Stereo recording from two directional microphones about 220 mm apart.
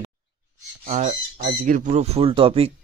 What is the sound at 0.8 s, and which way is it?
Speech, 35° right (ahead or behind).